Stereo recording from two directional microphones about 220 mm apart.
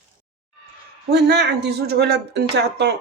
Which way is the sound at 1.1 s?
50° right (ahead or behind).